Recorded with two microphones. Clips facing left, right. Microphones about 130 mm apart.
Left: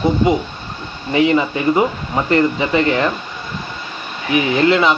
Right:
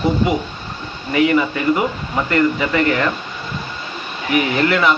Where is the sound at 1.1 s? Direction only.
25° left (ahead or behind).